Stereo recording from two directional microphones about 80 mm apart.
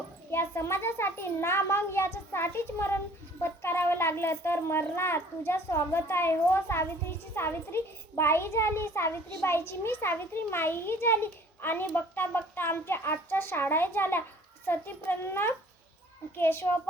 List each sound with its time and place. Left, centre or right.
0.3 s a child's voice: left